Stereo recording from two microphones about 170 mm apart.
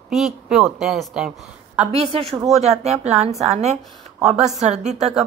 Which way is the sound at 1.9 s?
35° right (ahead or behind).